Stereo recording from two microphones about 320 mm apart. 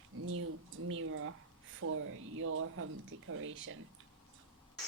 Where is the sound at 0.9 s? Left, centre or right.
Right.